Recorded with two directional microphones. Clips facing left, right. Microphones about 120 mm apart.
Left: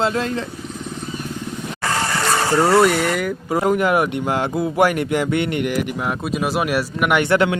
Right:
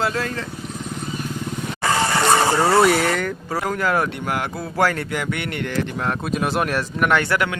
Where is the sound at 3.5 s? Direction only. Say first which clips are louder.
Left 5 dB; 20° left (ahead or behind).